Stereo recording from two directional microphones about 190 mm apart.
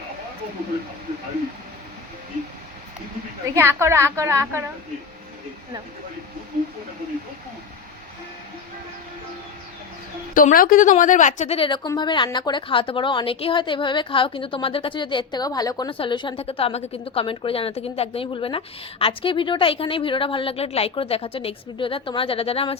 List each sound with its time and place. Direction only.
3.5 s a woman's voice: 15° right (ahead or behind)
10.3 s a woman's voice: 45° left (ahead or behind); by 22.8 s 30° left (ahead or behind)